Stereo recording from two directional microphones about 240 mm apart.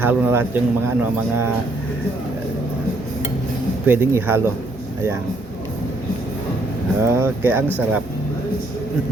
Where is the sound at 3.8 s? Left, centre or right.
Centre.